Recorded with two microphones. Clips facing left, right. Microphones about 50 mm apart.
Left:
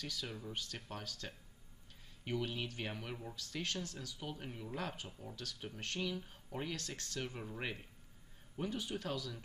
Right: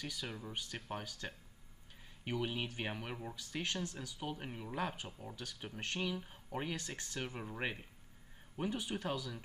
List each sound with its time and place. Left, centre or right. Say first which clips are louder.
0.0 s speech: right 1 dB; centre